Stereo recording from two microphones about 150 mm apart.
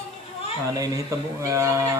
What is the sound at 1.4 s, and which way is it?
Speech, 20° right (ahead or behind).